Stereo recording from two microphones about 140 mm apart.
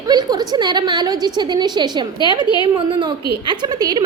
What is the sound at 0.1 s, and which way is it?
A woman's voice, 30° right (ahead or behind).